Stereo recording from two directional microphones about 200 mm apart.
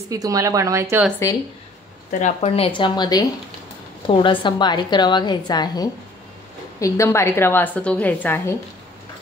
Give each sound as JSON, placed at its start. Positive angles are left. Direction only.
{"t": 0.1, "sound": "speech", "side_deg": -15}
{"t": 2.0, "sound": "a woman's voice", "side_deg": 40}